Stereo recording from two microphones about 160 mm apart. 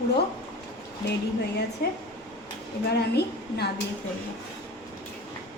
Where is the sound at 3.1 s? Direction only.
90° left.